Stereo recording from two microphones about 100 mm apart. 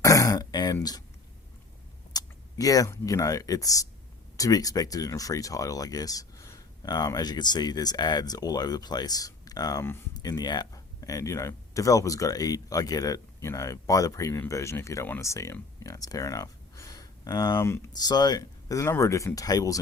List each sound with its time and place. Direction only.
0.0 s throat clearing: 35° left (ahead or behind)
2.1 s speech: 35° left (ahead or behind)
15.8 s a sound: 35° left (ahead or behind)
17.6 s speech: 25° left (ahead or behind)
17.9 s speech: 45° left (ahead or behind)